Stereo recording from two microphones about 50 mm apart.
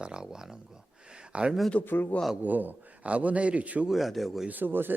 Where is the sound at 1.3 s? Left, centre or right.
Right.